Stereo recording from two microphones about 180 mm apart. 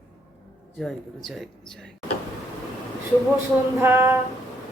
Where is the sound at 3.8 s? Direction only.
15° right (ahead or behind).